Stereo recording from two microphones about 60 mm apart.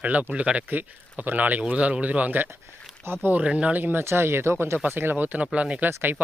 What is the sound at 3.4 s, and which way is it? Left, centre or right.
Speech, centre.